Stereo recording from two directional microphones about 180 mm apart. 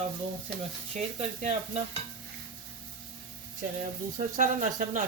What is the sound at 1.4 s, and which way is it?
Stir, 40° right (ahead or behind).